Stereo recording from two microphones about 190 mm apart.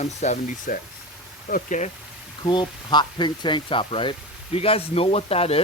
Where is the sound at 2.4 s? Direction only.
25° left (ahead or behind).